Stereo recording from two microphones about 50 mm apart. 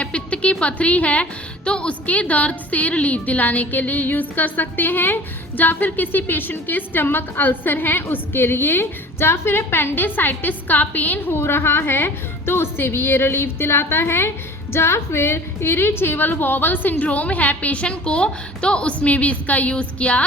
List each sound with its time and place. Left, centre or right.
0.0 s a woman's voice: left
11.3 s a woman's voice: left